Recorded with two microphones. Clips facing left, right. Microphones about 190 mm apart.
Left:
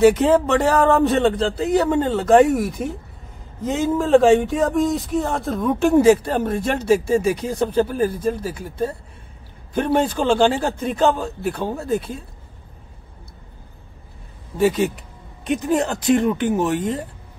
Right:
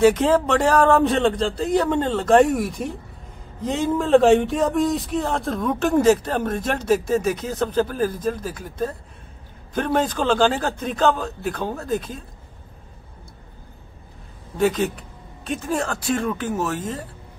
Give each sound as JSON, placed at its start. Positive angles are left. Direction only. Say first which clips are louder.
{"t": 0.0, "sound": "speech", "louder": "left 2 dB", "side_deg": 10}
{"t": 14.6, "sound": "speech", "louder": "left 2 dB", "side_deg": 10}